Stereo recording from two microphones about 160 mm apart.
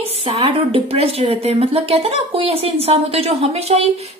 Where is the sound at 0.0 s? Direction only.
35° right (ahead or behind).